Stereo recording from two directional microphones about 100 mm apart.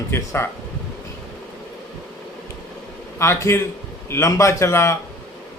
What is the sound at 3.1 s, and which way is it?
A man's voice, 30° left (ahead or behind).